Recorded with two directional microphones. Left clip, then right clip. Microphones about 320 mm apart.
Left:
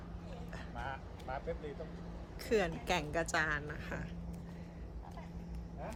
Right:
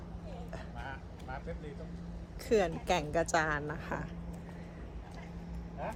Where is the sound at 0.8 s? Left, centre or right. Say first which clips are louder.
Left 5 dB; left.